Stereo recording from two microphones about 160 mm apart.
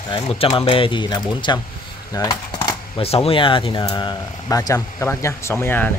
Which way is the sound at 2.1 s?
20° left (ahead or behind).